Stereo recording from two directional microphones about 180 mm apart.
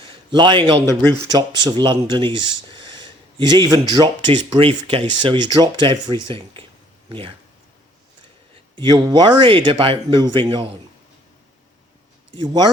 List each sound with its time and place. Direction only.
0.3 s speech: 25° right (ahead or behind)
8.7 s speech: 25° right (ahead or behind)
12.4 s speech: 20° right (ahead or behind)